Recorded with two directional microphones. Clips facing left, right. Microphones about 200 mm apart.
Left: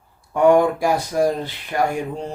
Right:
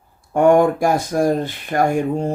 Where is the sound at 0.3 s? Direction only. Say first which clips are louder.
Right 2 dB; 50° right (ahead or behind).